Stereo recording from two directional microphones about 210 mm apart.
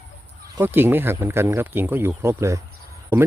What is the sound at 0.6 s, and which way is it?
Speech, 10° right (ahead or behind).